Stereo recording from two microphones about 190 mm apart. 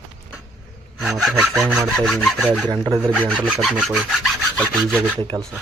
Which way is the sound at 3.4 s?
5° right (ahead or behind).